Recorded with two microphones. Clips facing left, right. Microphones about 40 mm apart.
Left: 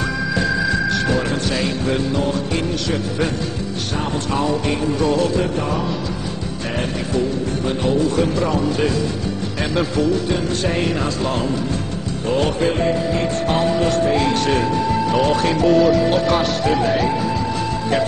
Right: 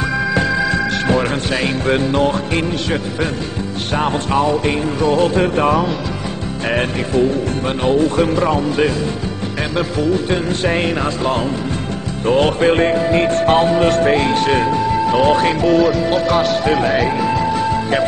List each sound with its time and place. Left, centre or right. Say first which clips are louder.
0.3 s music: right 2 dB; right
3.9 s speech: right 6 dB; right
10.3 s speech: right 3 dB; right
12.3 s music: right 5 dB; right
14.2 s speech: right 3 dB; right
15.6 s music: even; centre